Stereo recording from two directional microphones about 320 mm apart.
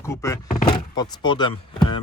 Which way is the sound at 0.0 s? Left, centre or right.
Centre.